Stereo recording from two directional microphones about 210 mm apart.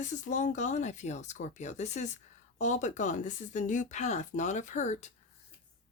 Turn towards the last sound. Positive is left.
turn(degrees=35)  # may be behind; listen again after turning